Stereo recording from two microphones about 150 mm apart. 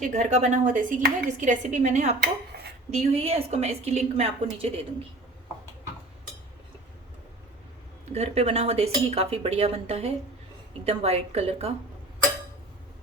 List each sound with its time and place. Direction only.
0.1 s speech: 50° right (ahead or behind)
8.1 s speech: 45° right (ahead or behind)